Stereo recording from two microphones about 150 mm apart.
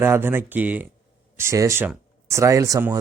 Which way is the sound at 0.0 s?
15° right (ahead or behind).